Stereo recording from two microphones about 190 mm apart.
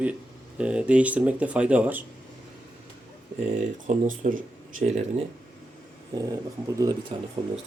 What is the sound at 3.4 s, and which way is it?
Speech, 35° right (ahead or behind).